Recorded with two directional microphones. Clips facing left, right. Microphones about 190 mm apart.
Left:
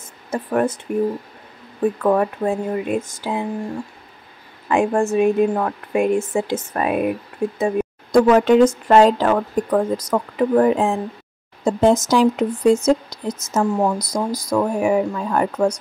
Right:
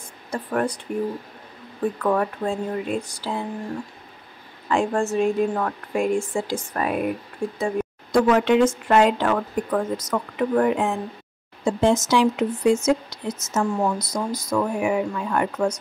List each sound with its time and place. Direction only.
0.3 s speech: 25° left (ahead or behind)
2.1 s speech: 20° left (ahead or behind)
4.6 s speech: 15° left (ahead or behind)
8.3 s speech: 40° left (ahead or behind)
13.9 s speech: 15° left (ahead or behind)
14.5 s speech: 35° left (ahead or behind)